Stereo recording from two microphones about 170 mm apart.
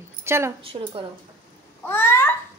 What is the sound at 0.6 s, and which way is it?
Speech, 35° right (ahead or behind).